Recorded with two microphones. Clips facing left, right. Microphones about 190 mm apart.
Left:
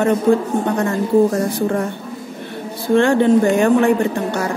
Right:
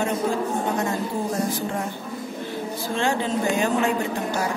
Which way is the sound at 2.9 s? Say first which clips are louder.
Left 12 dB; 60° left (ahead or behind).